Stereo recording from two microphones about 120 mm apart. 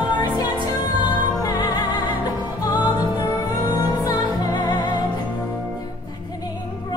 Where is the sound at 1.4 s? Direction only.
35° left (ahead or behind).